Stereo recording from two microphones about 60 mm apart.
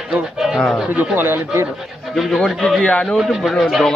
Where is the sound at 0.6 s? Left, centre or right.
Centre.